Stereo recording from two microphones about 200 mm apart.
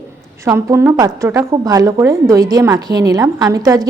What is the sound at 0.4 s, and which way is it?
A woman's voice, 15° right (ahead or behind).